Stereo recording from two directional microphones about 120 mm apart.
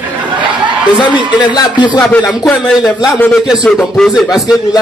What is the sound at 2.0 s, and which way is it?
Speech, 10° left (ahead or behind).